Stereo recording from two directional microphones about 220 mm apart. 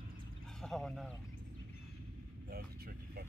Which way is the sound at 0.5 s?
Centre (ahead or behind).